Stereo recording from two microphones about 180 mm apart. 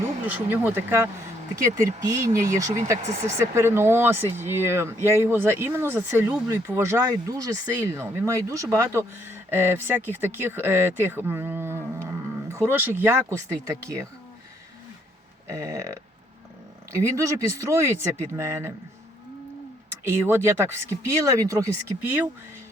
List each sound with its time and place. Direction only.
0.3 s speech: 10° right (ahead or behind)
15.4 s speech: 15° right (ahead or behind)
20.1 s speech: 15° right (ahead or behind)